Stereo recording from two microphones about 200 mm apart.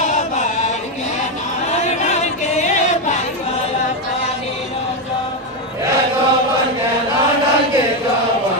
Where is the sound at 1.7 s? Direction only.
35° left (ahead or behind).